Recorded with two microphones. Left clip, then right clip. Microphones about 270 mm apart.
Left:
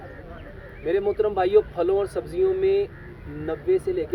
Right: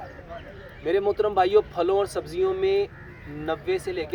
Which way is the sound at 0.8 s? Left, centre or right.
Centre.